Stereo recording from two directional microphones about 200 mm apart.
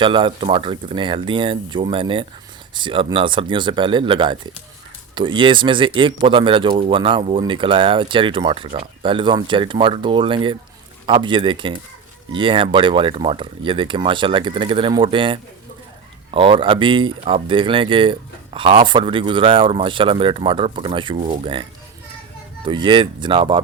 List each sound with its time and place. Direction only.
0.0 s speech: 25° right (ahead or behind)
22.6 s speech: 25° right (ahead or behind)